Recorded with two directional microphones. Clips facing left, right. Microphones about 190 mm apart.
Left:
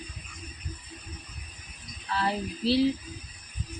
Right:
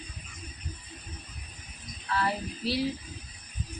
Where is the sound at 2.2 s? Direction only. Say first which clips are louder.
Left 2 dB; 25° left (ahead or behind).